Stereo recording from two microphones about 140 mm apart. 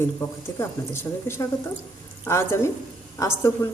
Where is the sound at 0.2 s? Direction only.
15° left (ahead or behind).